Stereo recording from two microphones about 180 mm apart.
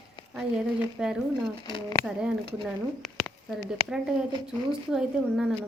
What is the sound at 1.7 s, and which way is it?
Speech, 30° left (ahead or behind).